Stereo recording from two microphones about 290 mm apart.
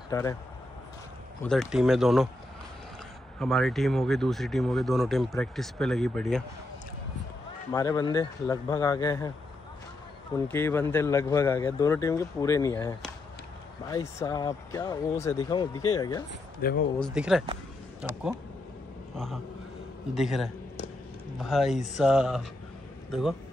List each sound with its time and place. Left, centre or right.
0.1 s a man's voice: centre
1.4 s speech: centre
3.3 s speech: centre
7.7 s a man's voice: centre
10.3 s a man's voice: centre
16.3 s speech: left
17.0 s a man's voice: centre